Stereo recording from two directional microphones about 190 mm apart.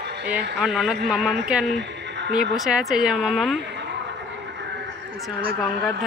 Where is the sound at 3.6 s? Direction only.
65° right (ahead or behind).